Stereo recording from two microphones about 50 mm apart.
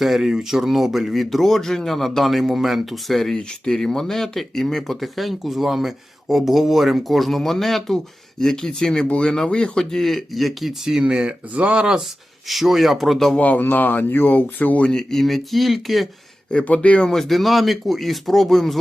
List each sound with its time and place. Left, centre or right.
0.0 s speech: centre
11.0 s speech: centre
12.5 s speech: centre
13.3 s speech: left
14.8 s speech: centre
16.6 s speech: left
17.1 s speech: centre